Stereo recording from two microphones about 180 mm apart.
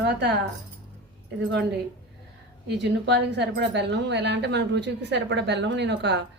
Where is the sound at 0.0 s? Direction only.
65° right (ahead or behind).